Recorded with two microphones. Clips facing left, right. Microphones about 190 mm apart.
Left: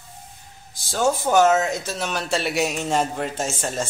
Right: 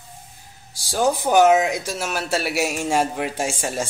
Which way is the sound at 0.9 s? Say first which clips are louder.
Right 1 dB; 15° right (ahead or behind).